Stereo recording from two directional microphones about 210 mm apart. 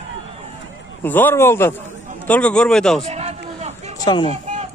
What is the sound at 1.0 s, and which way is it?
A man's voice, 10° left (ahead or behind).